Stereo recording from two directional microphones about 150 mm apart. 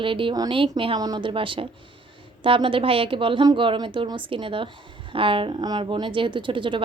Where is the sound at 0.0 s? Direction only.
35° right (ahead or behind).